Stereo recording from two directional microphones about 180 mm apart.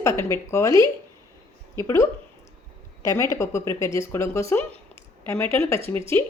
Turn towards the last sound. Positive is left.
turn(degrees=15)  # may be behind; listen again after turning